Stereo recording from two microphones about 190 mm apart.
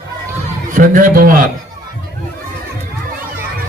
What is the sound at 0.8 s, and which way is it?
Speech, 50° right (ahead or behind).